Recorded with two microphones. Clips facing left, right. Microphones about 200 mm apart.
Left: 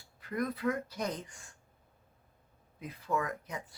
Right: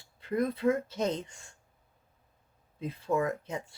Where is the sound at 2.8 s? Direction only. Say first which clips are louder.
Right 5 dB; 25° right (ahead or behind).